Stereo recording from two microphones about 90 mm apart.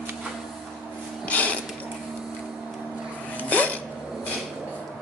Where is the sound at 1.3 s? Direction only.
15° left (ahead or behind).